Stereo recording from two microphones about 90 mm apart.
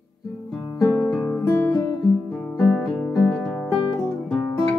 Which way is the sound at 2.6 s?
5° left (ahead or behind).